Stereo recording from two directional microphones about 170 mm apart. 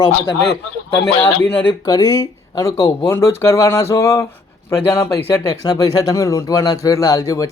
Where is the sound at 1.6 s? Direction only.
20° left (ahead or behind).